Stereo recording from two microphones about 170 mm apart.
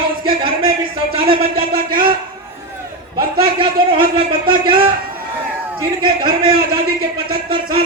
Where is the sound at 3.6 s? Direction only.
30° right (ahead or behind).